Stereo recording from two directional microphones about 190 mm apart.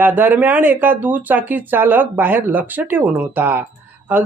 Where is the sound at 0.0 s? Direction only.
10° right (ahead or behind).